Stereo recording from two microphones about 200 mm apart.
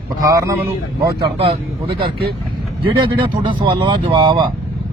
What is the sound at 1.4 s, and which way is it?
Speech, 25° right (ahead or behind).